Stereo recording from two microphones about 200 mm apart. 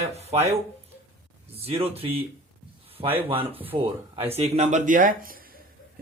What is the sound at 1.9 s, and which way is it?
Speech, 30° right (ahead or behind).